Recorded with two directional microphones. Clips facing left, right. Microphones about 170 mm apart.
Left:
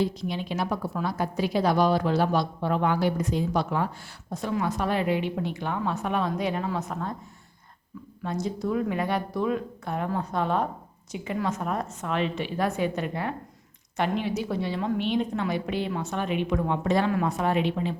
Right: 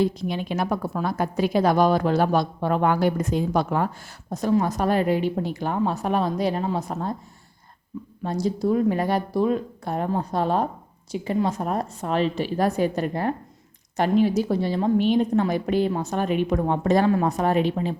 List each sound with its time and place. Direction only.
0.0 s a woman's voice: 50° right (ahead or behind); by 7.2 s 35° right (ahead or behind)
8.2 s a woman's voice: 35° right (ahead or behind)